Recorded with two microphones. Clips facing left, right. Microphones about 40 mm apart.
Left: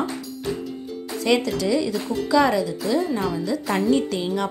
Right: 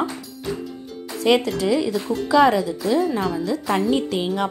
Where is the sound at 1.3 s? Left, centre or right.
Centre.